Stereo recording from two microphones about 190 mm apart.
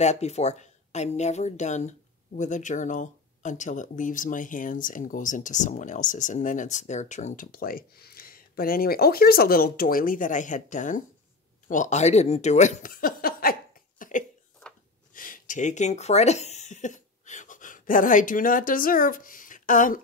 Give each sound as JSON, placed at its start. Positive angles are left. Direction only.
{"t": 0.0, "sound": "speech", "side_deg": 35}
{"t": 11.6, "sound": "chuckle", "side_deg": 40}
{"t": 15.1, "sound": "a sound", "side_deg": 45}